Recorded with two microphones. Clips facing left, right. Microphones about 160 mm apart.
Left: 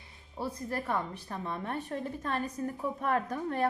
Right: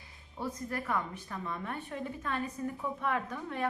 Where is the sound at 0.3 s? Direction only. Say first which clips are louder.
Left 2 dB; 30° left (ahead or behind).